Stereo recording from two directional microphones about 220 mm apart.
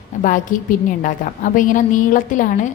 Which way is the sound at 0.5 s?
35° left (ahead or behind).